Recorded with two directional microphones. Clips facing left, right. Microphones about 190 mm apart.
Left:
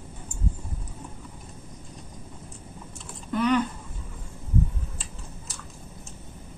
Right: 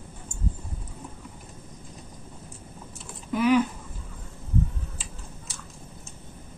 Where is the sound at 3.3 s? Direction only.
5° right (ahead or behind).